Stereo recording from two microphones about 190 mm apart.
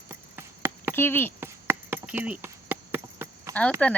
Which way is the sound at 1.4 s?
10° right (ahead or behind).